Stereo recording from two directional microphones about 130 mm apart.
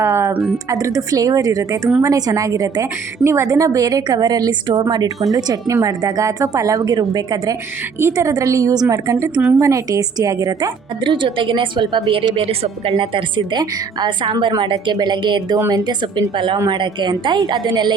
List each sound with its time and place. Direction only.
0.0 s music: 20° right (ahead or behind)
0.7 s a woman's voice: 25° right (ahead or behind)